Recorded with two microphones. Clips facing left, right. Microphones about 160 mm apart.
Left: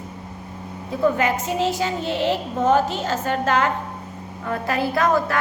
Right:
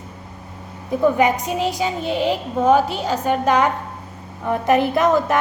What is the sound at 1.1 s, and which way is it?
A woman's voice, 15° right (ahead or behind).